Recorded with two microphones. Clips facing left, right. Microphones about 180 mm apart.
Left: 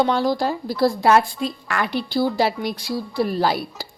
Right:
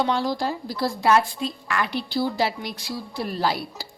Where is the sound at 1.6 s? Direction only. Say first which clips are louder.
Even; 50° left (ahead or behind).